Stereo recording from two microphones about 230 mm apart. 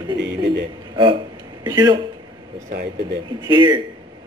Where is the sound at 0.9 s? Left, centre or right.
Right.